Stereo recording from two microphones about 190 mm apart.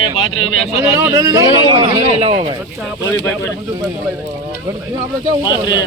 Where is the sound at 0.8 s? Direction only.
15° right (ahead or behind).